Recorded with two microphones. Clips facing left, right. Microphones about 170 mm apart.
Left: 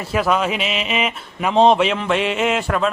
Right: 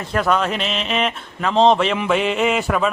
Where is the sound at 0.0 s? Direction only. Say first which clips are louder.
Even; 5° left (ahead or behind).